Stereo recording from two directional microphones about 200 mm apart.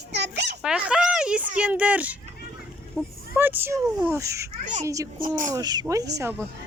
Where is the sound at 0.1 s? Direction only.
60° right (ahead or behind).